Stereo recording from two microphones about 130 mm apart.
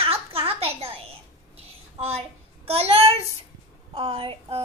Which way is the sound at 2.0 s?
50° right (ahead or behind).